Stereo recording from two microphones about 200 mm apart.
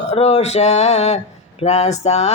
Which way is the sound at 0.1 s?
30° left (ahead or behind).